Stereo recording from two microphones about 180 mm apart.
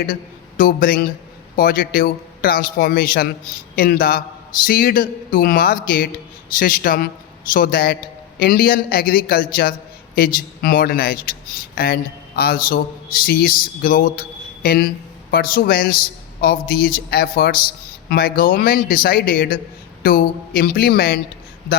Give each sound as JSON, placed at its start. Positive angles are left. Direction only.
{"t": 0.1, "sound": "a man's voice", "side_deg": 50}